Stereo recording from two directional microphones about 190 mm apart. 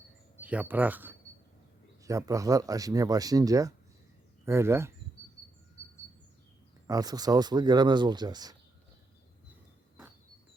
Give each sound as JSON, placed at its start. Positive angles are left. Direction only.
{"t": 0.3, "sound": "speech", "side_deg": -10}
{"t": 6.8, "sound": "speech", "side_deg": -20}